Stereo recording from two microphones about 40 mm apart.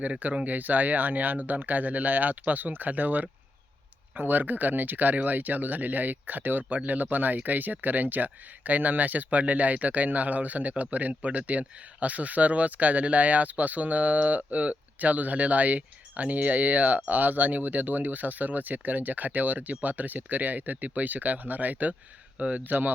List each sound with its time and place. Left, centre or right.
0.0 s speech: right
22.4 s speech: right
22.6 s speech: right